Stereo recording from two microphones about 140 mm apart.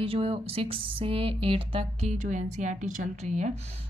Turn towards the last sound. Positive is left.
turn(degrees=-60)  # may be behind; listen again after turning